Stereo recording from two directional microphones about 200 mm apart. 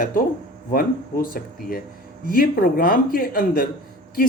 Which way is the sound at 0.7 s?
45° left (ahead or behind).